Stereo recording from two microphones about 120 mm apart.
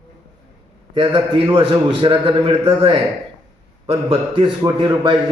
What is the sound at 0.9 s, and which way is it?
A man's voice, 45° right (ahead or behind).